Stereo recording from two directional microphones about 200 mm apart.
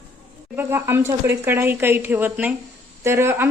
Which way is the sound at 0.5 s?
10° right (ahead or behind).